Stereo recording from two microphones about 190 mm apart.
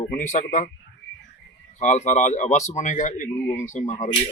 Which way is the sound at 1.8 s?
40° left (ahead or behind).